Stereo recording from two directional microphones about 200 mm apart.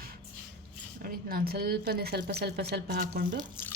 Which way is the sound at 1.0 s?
50° right (ahead or behind).